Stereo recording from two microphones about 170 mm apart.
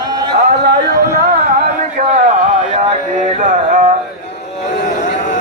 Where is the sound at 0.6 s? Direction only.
65° right (ahead or behind); by 2.6 s 50° right (ahead or behind).